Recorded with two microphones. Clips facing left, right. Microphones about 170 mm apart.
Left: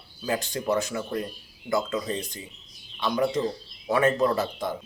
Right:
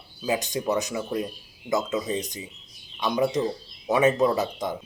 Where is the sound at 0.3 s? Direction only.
20° right (ahead or behind).